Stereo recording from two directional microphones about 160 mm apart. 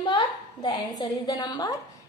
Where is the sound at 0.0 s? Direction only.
25° left (ahead or behind).